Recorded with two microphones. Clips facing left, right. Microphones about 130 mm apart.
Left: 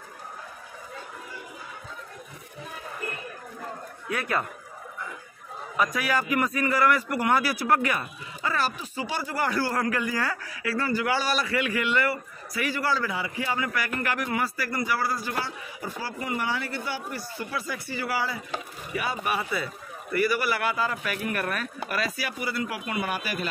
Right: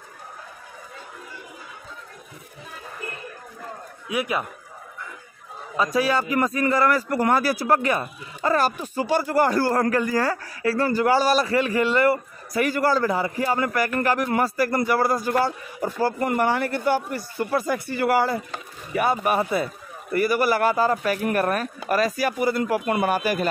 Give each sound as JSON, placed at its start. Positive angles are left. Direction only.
{"t": 4.1, "sound": "a man's voice", "side_deg": -15}
{"t": 5.9, "sound": "a man's voice", "side_deg": -30}
{"t": 8.4, "sound": "a man's voice", "side_deg": -45}